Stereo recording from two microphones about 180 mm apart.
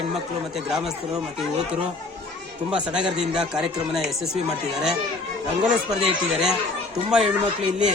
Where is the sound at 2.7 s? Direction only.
5° right (ahead or behind).